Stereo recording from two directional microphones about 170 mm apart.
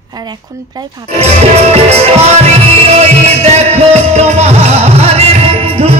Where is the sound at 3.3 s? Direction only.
40° right (ahead or behind).